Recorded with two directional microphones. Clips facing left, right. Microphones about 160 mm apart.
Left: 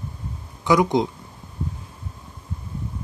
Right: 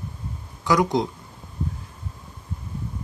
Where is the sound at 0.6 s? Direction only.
20° left (ahead or behind).